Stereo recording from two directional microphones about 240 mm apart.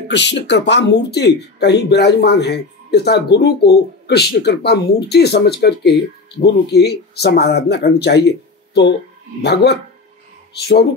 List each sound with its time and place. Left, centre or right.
0.1 s speech: left